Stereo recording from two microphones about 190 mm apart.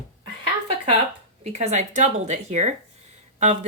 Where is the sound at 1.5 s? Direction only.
35° right (ahead or behind).